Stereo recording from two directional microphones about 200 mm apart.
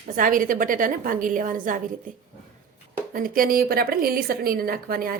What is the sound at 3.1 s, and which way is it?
A woman's voice, 45° right (ahead or behind).